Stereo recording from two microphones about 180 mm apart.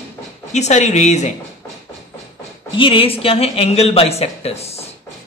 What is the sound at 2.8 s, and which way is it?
Speech, 30° left (ahead or behind).